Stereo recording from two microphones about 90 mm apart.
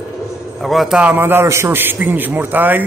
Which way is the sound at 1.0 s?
20° right (ahead or behind).